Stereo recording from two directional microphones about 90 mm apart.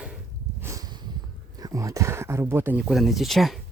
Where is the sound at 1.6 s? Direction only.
40° right (ahead or behind).